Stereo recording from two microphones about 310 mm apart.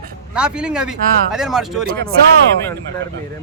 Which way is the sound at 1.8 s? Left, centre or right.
Right.